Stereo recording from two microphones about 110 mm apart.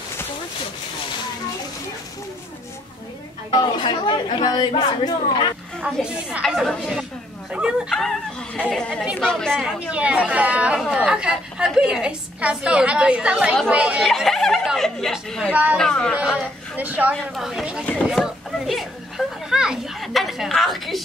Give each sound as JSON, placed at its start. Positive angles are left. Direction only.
{"t": 3.5, "sound": "speech", "side_deg": 45}
{"t": 6.0, "sound": "speech", "side_deg": -10}
{"t": 6.4, "sound": "speech", "side_deg": 0}
{"t": 9.5, "sound": "speech", "side_deg": -5}
{"t": 14.0, "sound": "speech", "side_deg": 0}
{"t": 15.5, "sound": "speech", "side_deg": -15}
{"t": 15.8, "sound": "speech", "side_deg": 10}
{"t": 16.2, "sound": "a woman's voice", "side_deg": -15}
{"t": 18.0, "sound": "a sound", "side_deg": -5}